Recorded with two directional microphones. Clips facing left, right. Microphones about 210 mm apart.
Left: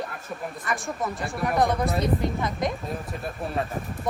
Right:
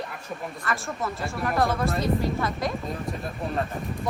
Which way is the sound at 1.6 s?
20° left (ahead or behind).